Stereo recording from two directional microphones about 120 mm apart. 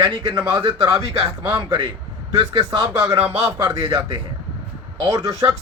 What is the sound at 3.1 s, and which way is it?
Speech, 55° right (ahead or behind).